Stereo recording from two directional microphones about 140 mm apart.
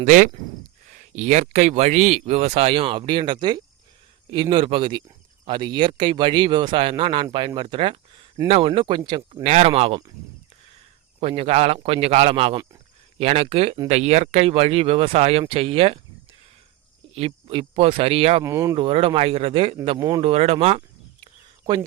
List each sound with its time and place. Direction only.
0.0 s speech: 65° right (ahead or behind); by 9.5 s 35° right (ahead or behind)
9.5 s speech: 50° right (ahead or behind)
11.2 s speech: 45° right (ahead or behind)
17.2 s speech: 40° right (ahead or behind)
18.4 s speech: 20° right (ahead or behind)
18.8 s speech: 40° right (ahead or behind)
20.0 s speech: 25° right (ahead or behind)
20.2 s speech: 45° right (ahead or behind)